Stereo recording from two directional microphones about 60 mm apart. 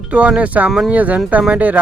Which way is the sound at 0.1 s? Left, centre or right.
Right.